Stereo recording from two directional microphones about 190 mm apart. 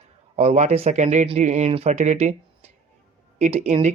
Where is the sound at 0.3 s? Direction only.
35° right (ahead or behind).